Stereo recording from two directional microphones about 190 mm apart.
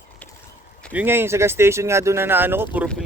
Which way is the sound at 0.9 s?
10° right (ahead or behind).